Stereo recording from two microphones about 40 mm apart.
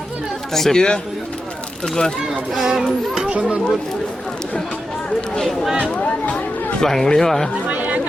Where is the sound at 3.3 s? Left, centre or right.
Right.